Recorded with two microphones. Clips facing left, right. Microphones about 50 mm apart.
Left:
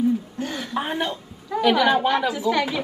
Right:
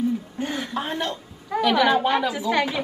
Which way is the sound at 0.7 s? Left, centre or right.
Centre.